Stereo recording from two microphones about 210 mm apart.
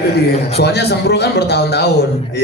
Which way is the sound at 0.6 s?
50° left (ahead or behind).